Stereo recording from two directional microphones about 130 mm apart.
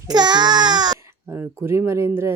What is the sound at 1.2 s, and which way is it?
Speech, 15° right (ahead or behind).